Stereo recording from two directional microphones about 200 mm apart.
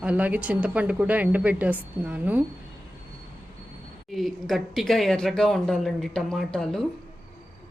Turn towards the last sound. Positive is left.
turn(degrees=0)  # may be behind; listen again after turning